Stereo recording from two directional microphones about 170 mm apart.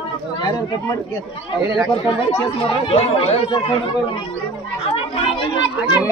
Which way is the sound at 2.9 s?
35° left (ahead or behind).